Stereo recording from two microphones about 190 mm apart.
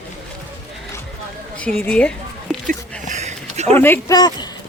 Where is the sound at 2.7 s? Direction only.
40° right (ahead or behind).